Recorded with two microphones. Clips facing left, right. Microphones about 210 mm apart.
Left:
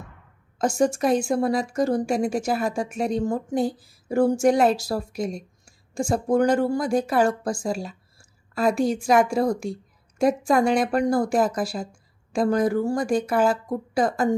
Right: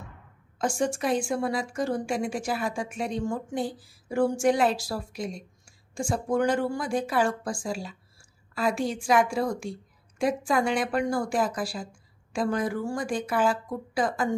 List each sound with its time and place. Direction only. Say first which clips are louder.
0.6 s a woman's voice: left 6 dB; 40° left (ahead or behind)